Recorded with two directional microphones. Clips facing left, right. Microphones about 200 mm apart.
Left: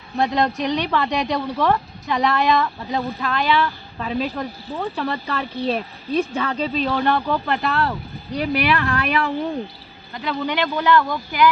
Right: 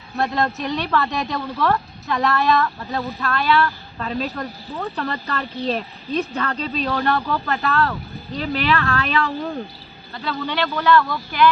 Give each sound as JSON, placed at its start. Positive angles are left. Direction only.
{"t": 0.2, "sound": "speech", "side_deg": 15}